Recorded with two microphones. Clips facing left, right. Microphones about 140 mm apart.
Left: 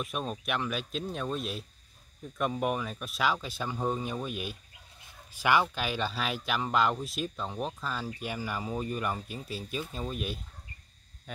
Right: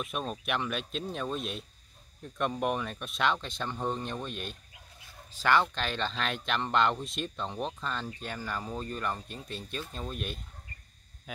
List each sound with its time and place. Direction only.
0.0 s speech: centre (ahead or behind)